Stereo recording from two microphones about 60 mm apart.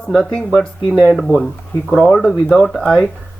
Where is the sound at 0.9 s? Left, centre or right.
Centre.